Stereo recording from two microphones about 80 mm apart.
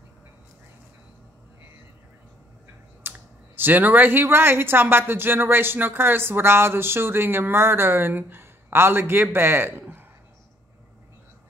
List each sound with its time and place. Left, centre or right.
3.0 s speech: right